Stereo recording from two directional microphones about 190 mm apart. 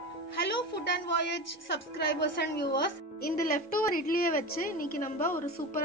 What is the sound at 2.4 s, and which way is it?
Speech, 60° left (ahead or behind).